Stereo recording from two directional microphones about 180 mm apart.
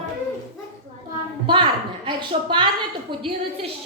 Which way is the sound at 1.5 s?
25° right (ahead or behind).